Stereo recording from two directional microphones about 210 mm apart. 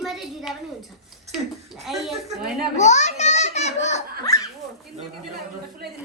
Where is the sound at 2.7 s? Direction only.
35° left (ahead or behind).